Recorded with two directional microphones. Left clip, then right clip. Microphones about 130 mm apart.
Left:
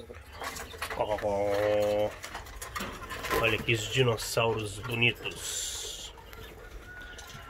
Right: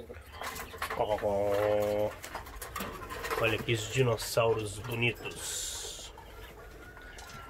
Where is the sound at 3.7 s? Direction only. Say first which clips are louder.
Left 3 dB; 10° left (ahead or behind).